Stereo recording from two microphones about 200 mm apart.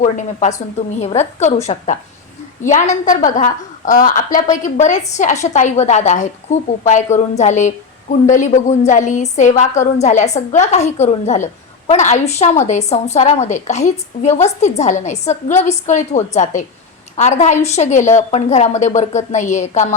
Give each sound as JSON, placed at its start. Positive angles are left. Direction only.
{"t": 0.0, "sound": "a woman's voice", "side_deg": 40}